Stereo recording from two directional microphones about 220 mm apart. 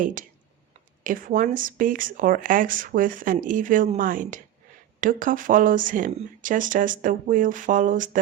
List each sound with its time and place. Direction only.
0.0 s speech: 35° right (ahead or behind)